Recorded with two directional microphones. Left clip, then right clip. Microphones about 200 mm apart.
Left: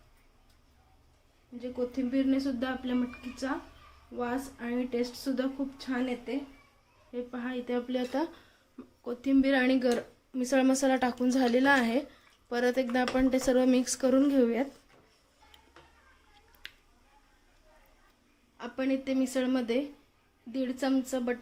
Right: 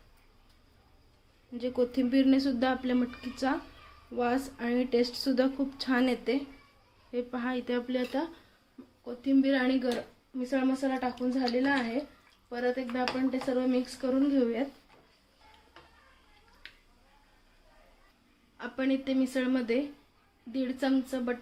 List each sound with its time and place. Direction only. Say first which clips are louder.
1.5 s speech: right 4 dB; 30° right (ahead or behind)
7.1 s a woman's voice: right 3 dB; 15° right (ahead or behind)
7.7 s speech: left 1 dB; centre (ahead or behind)
9.0 s speech: even; 30° left (ahead or behind)
10.3 s a woman's voice: left 4 dB; 45° left (ahead or behind)
18.5 s a woman's voice: right 1 dB; 5° left (ahead or behind)